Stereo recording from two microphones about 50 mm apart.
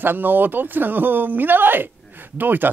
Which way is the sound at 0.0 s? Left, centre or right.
Right.